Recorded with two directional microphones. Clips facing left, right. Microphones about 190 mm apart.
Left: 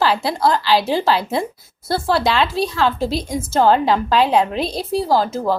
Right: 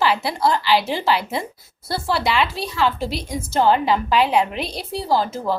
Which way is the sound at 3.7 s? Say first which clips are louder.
Left 2 dB; 35° left (ahead or behind).